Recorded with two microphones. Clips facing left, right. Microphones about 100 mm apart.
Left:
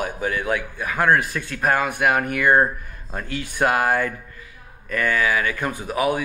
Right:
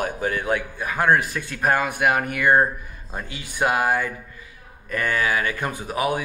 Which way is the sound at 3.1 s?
10° right (ahead or behind).